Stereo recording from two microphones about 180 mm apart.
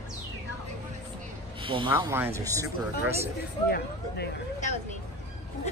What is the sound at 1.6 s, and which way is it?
Speech, 30° right (ahead or behind).